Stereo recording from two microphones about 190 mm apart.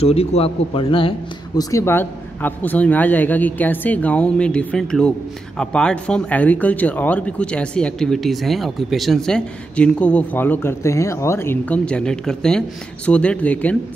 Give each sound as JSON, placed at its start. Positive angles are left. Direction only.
{"t": 0.0, "sound": "speech", "side_deg": 30}
{"t": 1.6, "sound": "speech", "side_deg": 15}